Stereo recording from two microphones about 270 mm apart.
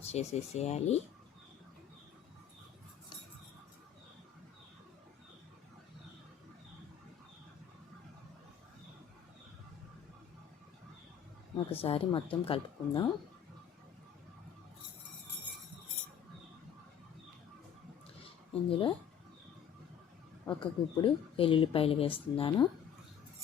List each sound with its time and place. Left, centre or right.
0.0 s speech: left
11.5 s speech: centre
18.7 s speech: centre
20.4 s speech: centre